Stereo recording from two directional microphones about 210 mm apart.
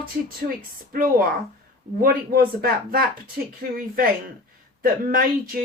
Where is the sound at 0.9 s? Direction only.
45° right (ahead or behind).